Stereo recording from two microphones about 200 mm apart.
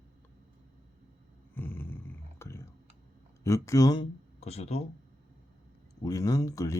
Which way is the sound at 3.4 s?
15° left (ahead or behind).